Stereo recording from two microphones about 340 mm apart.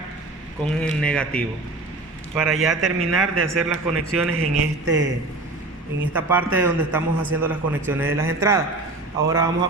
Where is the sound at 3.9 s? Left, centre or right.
Right.